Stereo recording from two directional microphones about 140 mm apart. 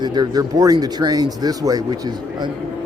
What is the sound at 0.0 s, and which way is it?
Speech, 30° right (ahead or behind).